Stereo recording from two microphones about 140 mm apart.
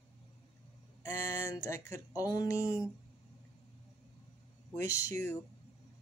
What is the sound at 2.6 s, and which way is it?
Speech, 10° right (ahead or behind).